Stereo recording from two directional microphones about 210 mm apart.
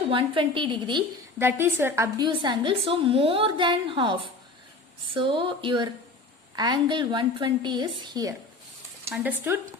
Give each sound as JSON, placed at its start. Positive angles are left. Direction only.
{"t": 0.1, "sound": "a woman's voice", "side_deg": -25}
{"t": 1.4, "sound": "a woman's voice", "side_deg": -10}